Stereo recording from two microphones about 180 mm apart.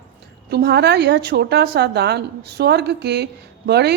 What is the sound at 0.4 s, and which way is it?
A woman's voice, 65° right (ahead or behind).